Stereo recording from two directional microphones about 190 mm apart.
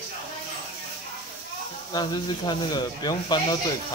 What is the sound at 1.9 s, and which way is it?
Speech, 20° left (ahead or behind).